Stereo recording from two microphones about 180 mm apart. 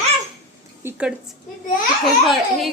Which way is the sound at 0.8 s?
10° right (ahead or behind).